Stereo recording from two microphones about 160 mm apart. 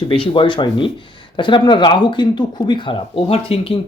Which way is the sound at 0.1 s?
30° left (ahead or behind).